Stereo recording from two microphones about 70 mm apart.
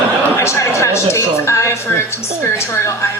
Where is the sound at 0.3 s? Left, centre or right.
Left.